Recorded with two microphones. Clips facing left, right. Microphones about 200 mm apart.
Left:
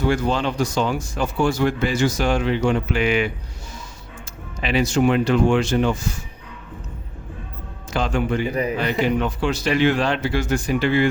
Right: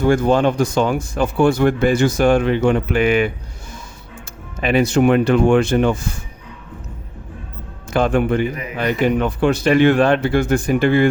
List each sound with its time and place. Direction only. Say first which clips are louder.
0.0 s speech: right 6 dB; 50° right (ahead or behind)
4.6 s speech: right 4 dB; 55° right (ahead or behind)
7.9 s speech: right 6 dB; 55° right (ahead or behind)